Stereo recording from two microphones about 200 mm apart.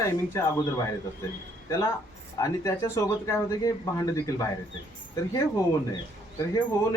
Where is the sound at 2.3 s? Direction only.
15° left (ahead or behind).